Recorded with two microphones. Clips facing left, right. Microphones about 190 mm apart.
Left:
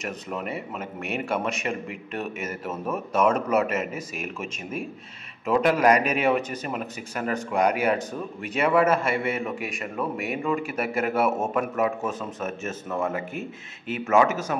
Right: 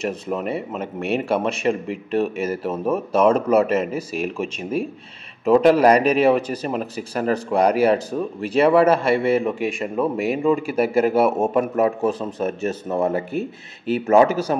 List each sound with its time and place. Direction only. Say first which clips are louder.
0.0 s a man's voice: right 7 dB; 30° right (ahead or behind)